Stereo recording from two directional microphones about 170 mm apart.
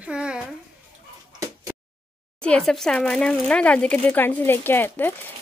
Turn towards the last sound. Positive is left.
turn(degrees=10)  # may be behind; listen again after turning